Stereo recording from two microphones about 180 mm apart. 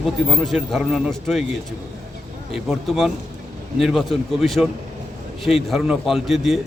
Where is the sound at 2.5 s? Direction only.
Centre (ahead or behind).